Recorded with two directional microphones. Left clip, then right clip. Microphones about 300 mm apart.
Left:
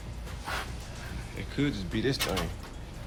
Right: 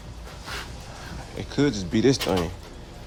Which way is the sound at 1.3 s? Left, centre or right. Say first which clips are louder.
Right 8 dB; centre.